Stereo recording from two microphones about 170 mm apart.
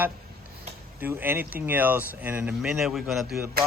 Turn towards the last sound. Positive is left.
turn(degrees=0)  # may be behind; listen again after turning